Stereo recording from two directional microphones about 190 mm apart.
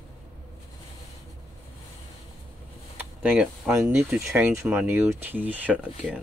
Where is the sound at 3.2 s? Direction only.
5° right (ahead or behind).